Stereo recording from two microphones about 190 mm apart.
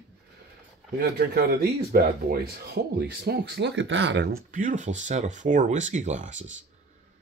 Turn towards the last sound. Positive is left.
turn(degrees=-40)  # may be behind; listen again after turning